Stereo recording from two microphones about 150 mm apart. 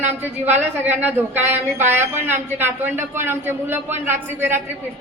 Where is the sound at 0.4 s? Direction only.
10° right (ahead or behind).